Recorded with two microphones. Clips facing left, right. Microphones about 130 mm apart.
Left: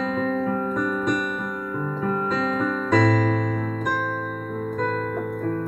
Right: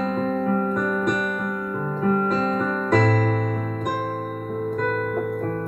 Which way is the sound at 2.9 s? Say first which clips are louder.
Left 1 dB; 45° right (ahead or behind).